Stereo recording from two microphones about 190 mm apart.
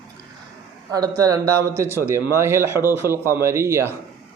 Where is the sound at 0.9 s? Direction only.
20° right (ahead or behind).